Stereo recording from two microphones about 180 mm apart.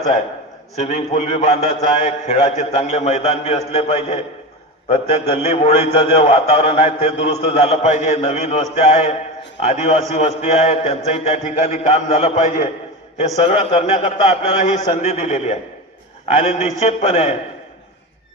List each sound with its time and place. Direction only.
0.8 s a man's voice: 40° left (ahead or behind)
5.5 s a man's voice: 40° left (ahead or behind)